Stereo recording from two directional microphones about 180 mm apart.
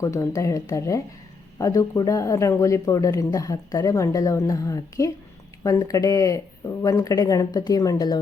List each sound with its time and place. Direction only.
0.0 s speech: 15° left (ahead or behind)